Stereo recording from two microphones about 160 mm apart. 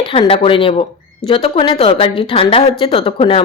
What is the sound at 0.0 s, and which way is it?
Speech, 35° left (ahead or behind).